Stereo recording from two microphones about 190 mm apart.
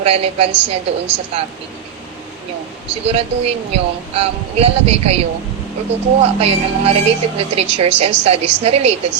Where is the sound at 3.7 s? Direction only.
30° right (ahead or behind).